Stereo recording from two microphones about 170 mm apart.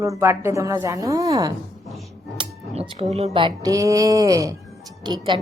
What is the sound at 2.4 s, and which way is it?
Music, 35° right (ahead or behind).